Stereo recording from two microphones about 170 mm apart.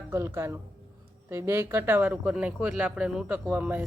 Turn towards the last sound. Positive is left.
turn(degrees=-10)  # may be behind; listen again after turning